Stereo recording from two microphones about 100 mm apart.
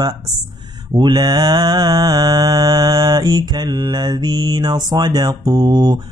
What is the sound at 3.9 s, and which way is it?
Music, 45° right (ahead or behind).